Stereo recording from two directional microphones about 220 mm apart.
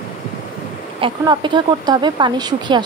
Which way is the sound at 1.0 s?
20° right (ahead or behind).